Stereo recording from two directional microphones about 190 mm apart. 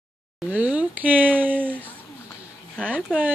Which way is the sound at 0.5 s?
5° right (ahead or behind).